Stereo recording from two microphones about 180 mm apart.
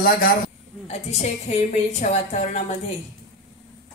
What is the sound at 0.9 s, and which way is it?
A woman's voice, 35° left (ahead or behind).